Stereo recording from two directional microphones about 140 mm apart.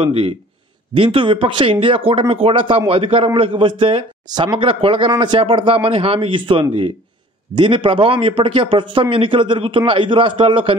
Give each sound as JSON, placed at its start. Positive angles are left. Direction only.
{"t": 0.0, "sound": "speech", "side_deg": -40}